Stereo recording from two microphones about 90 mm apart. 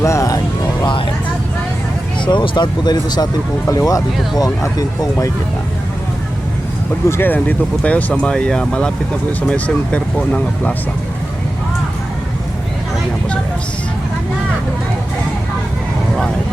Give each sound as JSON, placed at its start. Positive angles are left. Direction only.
{"t": 0.0, "sound": "speech", "side_deg": 35}
{"t": 2.2, "sound": "speech", "side_deg": 60}
{"t": 3.7, "sound": "speech", "side_deg": 40}
{"t": 7.1, "sound": "speech", "side_deg": 25}
{"t": 7.3, "sound": "speech", "side_deg": 15}